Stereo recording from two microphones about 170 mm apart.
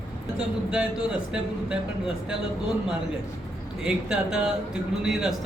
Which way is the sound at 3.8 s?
5° right (ahead or behind).